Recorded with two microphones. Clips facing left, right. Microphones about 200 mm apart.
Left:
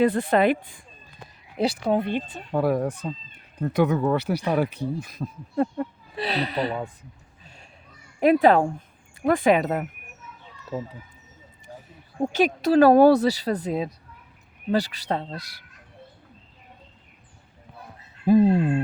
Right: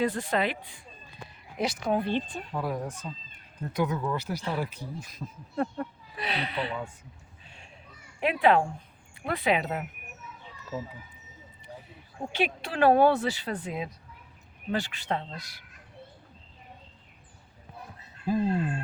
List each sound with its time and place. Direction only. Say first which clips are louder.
0.0 s speech: left 8 dB; 60° left (ahead or behind)
1.5 s speech: left 5 dB; 30° left (ahead or behind)
2.0 s speech: left 2 dB; 10° left (ahead or behind)
2.5 s speech: left 12 dB; 65° left (ahead or behind)
5.5 s speech: left 6 dB; 25° left (ahead or behind)
7.4 s a sound: left 3 dB; 40° left (ahead or behind)
8.2 s speech: left 6 dB; 40° left (ahead or behind)
11.7 s a sound: left 2 dB; 45° left (ahead or behind)
12.2 s speech: left 9 dB; 40° left (ahead or behind)
18.3 s speech: left 10 dB; 65° left (ahead or behind)